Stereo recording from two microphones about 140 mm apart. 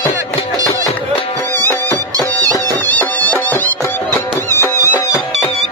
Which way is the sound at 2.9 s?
10° left (ahead or behind).